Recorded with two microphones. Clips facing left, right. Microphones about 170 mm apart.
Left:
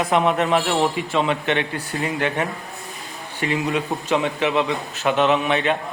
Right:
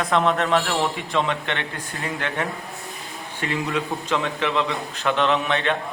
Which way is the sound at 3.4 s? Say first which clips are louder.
Left 3 dB; 15° left (ahead or behind).